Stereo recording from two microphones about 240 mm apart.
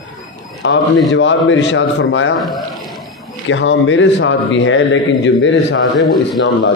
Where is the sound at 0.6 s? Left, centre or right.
Left.